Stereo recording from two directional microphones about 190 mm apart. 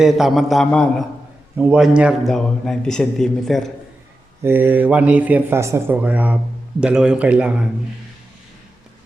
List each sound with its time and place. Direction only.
0.0 s a man's voice: centre (ahead or behind)
1.5 s a man's voice: 5° right (ahead or behind)
4.4 s a man's voice: 10° right (ahead or behind)